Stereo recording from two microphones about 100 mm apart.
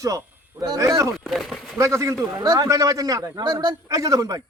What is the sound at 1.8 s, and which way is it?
Speech, 30° right (ahead or behind).